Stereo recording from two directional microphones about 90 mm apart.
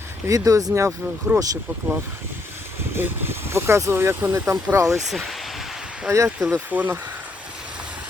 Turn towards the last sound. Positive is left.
turn(degrees=-10)  # may be behind; listen again after turning